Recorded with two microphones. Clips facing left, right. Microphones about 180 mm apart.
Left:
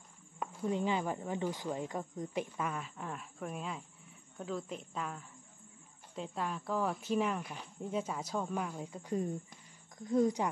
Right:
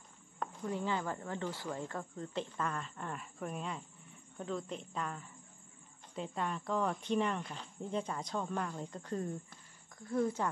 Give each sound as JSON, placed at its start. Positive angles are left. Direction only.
{"t": 0.7, "sound": "a woman's voice", "side_deg": 20}